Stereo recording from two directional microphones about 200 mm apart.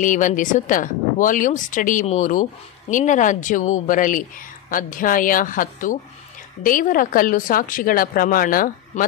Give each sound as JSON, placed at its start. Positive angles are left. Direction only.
{"t": 0.0, "sound": "a woman's voice", "side_deg": 40}